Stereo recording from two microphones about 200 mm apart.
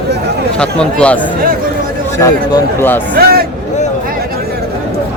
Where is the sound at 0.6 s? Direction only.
5° left (ahead or behind).